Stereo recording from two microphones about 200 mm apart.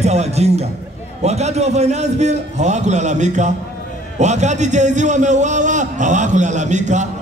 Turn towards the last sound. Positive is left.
turn(degrees=-35)  # may be behind; listen again after turning